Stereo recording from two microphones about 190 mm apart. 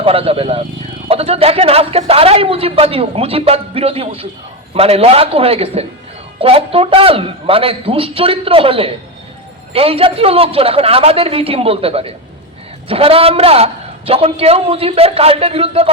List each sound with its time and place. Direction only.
0.0 s a man's voice: 30° right (ahead or behind)